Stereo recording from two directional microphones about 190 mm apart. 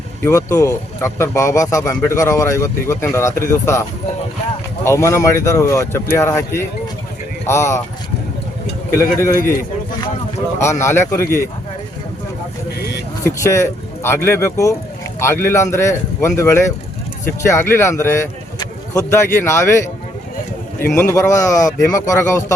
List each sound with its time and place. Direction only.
0.3 s a man's voice: 15° left (ahead or behind)
9.0 s a man's voice: 15° left (ahead or behind)
10.6 s a man's voice: 15° left (ahead or behind)
13.2 s a man's voice: 15° left (ahead or behind)